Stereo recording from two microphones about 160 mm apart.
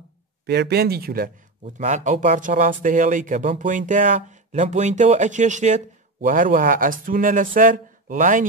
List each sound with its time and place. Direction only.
0.5 s speech: 90° right; by 1.3 s 70° right (ahead or behind)
1.6 s speech: 45° right (ahead or behind)